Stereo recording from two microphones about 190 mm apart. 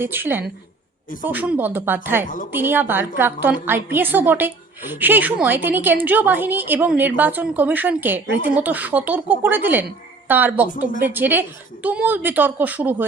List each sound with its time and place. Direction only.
0.0 s a woman's voice: 10° right (ahead or behind)
2.2 s a woman's voice: 45° left (ahead or behind)
2.5 s a woman's voice: 10° right (ahead or behind)